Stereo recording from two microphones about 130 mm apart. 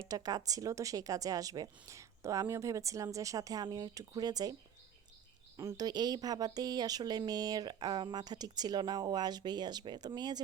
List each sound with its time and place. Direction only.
0.0 s a woman's voice: 30° right (ahead or behind)
5.5 s speech: 25° right (ahead or behind)